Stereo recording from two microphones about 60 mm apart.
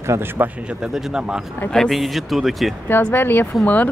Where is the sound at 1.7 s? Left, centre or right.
Centre.